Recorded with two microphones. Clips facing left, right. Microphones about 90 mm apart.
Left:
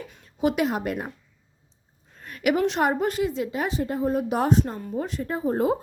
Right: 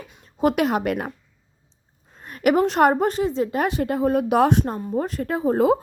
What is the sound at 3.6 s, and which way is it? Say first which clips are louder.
Speech: right 4 dB; 65° right (ahead or behind).